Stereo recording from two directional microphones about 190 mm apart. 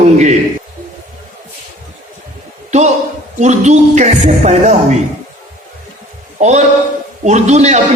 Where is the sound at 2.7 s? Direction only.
35° right (ahead or behind).